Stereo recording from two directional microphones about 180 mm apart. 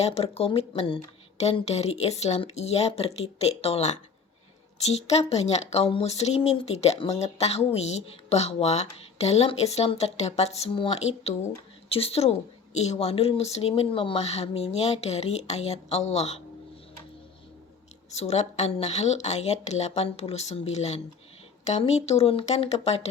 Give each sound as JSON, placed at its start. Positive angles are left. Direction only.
{"t": 0.0, "sound": "a woman's voice", "side_deg": 35}
{"t": 18.1, "sound": "a woman's voice", "side_deg": 35}